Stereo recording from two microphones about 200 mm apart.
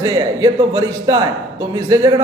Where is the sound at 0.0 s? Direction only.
20° right (ahead or behind).